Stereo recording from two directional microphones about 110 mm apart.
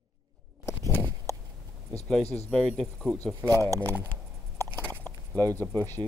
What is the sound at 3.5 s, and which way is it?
Speech, 25° left (ahead or behind).